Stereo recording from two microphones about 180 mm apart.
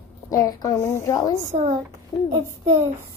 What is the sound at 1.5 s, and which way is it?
Speech, 40° right (ahead or behind).